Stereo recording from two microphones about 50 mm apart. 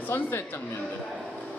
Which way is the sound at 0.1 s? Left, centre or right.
Left.